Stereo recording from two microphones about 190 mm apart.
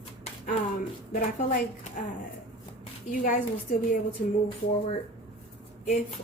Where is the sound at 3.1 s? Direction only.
45° left (ahead or behind).